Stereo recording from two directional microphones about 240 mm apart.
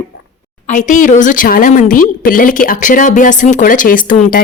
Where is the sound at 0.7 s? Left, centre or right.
Left.